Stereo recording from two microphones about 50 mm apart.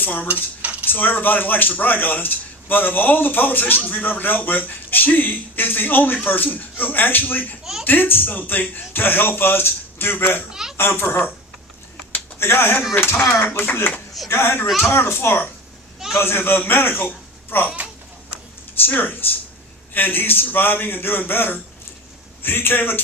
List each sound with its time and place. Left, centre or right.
0.0 s cutlery: left
0.6 s cutlery: right
0.9 s speech: left
7.6 s speech: centre
7.9 s speech: left
10.5 s a child's voice: centre
10.8 s speech: left
12.4 s speech: left
18.9 s speech: left